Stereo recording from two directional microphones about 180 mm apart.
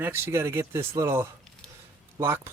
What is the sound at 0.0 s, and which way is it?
Speech, 15° right (ahead or behind).